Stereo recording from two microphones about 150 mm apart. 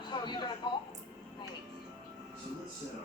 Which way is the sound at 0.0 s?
30° left (ahead or behind).